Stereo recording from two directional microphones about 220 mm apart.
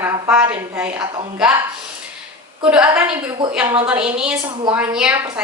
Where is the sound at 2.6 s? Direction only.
5° right (ahead or behind).